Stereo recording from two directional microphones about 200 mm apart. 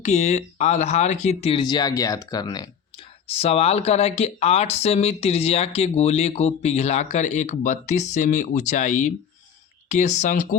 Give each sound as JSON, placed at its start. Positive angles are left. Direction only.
{"t": 0.0, "sound": "speech", "side_deg": 35}